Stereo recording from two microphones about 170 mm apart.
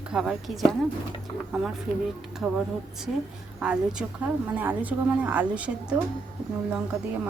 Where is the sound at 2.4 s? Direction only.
5° right (ahead or behind).